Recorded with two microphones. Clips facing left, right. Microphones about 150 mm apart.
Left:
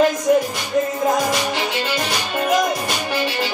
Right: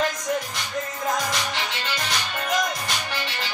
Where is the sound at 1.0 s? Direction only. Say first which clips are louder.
Left 4 dB; 25° left (ahead or behind).